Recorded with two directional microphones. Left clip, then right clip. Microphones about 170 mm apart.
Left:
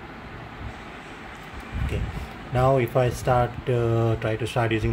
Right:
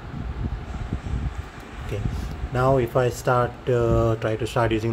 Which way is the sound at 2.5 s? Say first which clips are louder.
Even; 5° right (ahead or behind).